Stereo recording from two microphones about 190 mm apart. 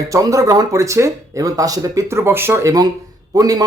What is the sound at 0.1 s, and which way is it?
Speech, 15° right (ahead or behind).